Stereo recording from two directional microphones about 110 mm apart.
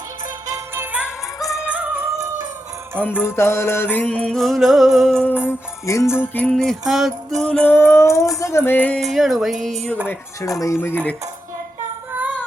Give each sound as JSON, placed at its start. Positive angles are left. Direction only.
{"t": 0.5, "sound": "music", "side_deg": -20}
{"t": 0.9, "sound": "music", "side_deg": -5}
{"t": 3.2, "sound": "music", "side_deg": 20}
{"t": 5.8, "sound": "music", "side_deg": 30}
{"t": 6.5, "sound": "music", "side_deg": 5}
{"t": 7.7, "sound": "music", "side_deg": 20}
{"t": 9.0, "sound": "music", "side_deg": 0}
{"t": 10.4, "sound": "speech", "side_deg": 30}
{"t": 10.8, "sound": "music", "side_deg": 20}
{"t": 12.1, "sound": "female singing", "side_deg": -15}